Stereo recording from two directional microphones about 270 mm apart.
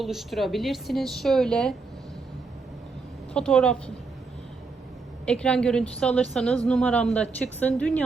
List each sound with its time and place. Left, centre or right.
0.0 s a woman's voice: centre
3.3 s a woman's voice: centre
5.2 s a woman's voice: centre